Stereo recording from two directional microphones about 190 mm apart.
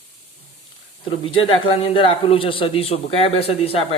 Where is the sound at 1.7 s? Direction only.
30° left (ahead or behind).